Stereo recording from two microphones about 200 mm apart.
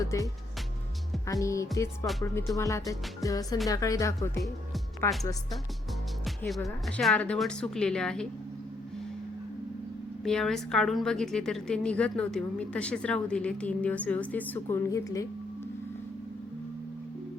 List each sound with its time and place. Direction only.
0.0 s speech: 15° left (ahead or behind)
1.3 s speech: 15° left (ahead or behind)
6.2 s a woman's voice: centre (ahead or behind)
10.2 s a woman's voice: centre (ahead or behind)